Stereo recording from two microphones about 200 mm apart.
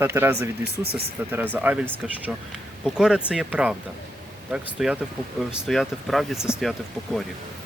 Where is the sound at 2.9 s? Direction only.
5° right (ahead or behind).